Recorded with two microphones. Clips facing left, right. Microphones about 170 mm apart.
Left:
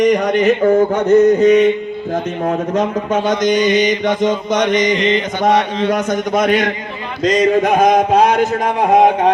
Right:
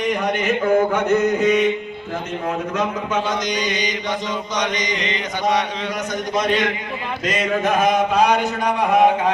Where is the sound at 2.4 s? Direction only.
45° left (ahead or behind).